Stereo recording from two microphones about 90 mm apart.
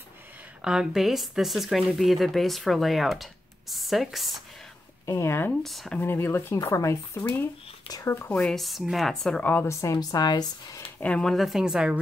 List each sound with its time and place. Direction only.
0.6 s speech: 5° right (ahead or behind)
5.0 s speech: 30° left (ahead or behind)
5.5 s speech: centre (ahead or behind)
5.9 s speech: 25° left (ahead or behind)
8.3 s speech: 5° left (ahead or behind)
9.4 s speech: 20° left (ahead or behind)
9.7 s speech: 35° left (ahead or behind)
9.9 s speech: 50° left (ahead or behind)
11.0 s speech: 10° left (ahead or behind)
11.3 s a woman's voice: centre (ahead or behind)